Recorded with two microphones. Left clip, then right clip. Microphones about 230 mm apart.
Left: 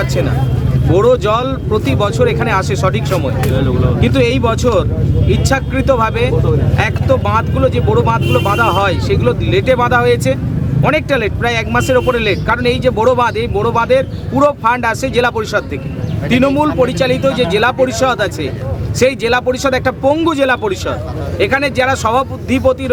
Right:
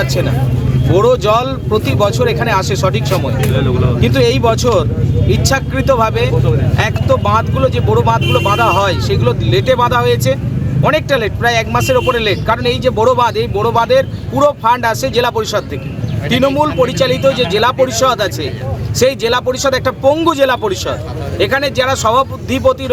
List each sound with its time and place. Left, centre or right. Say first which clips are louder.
0.9 s speech: right 1 dB; centre
3.6 s speech: right 1 dB; right
4.0 s speech: right 2 dB; centre